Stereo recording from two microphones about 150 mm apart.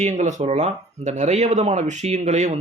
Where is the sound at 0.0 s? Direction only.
50° right (ahead or behind).